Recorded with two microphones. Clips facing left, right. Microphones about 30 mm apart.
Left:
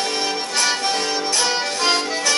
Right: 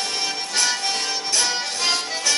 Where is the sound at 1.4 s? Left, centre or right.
Left.